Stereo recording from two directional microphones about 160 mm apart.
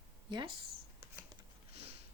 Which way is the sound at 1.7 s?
40° right (ahead or behind).